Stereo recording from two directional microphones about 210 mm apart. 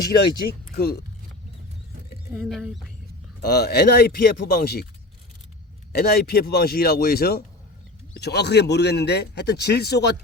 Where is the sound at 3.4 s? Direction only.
50° left (ahead or behind).